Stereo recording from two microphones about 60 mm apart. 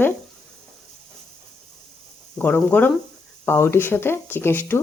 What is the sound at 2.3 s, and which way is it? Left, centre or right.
Speech, left.